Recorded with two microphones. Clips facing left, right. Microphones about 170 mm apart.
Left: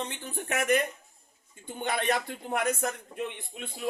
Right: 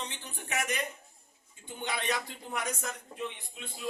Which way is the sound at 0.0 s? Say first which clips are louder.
Left 6 dB; 50° left (ahead or behind).